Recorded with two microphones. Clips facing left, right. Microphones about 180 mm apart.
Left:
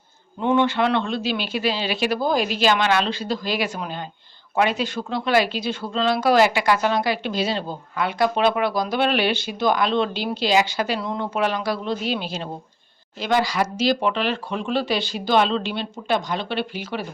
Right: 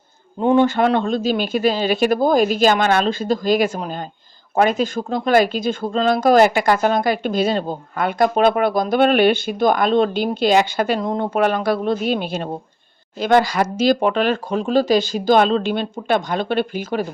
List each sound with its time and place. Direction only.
0.3 s a woman's voice: 40° right (ahead or behind)